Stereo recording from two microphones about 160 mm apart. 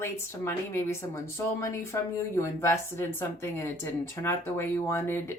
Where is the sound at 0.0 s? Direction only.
15° left (ahead or behind).